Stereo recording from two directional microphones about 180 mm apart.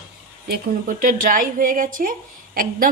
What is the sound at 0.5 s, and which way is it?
A woman's voice, 50° right (ahead or behind).